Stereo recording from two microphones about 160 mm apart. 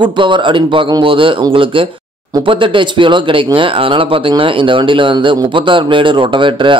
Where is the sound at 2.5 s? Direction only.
30° right (ahead or behind).